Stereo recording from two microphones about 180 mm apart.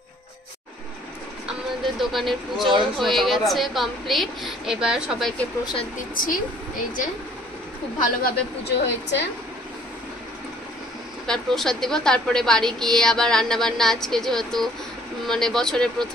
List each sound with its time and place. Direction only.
2.0 s a woman's voice: centre (ahead or behind)
6.1 s a woman's voice: 50° left (ahead or behind)
8.0 s a woman's voice: 60° left (ahead or behind)
11.2 s a woman's voice: centre (ahead or behind)